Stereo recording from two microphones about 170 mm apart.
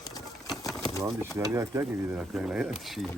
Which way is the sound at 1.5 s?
15° right (ahead or behind).